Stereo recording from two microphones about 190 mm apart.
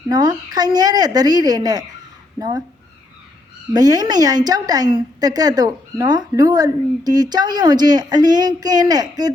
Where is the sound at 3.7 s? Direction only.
20° right (ahead or behind).